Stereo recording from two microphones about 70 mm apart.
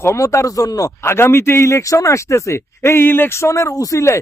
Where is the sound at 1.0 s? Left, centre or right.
Left.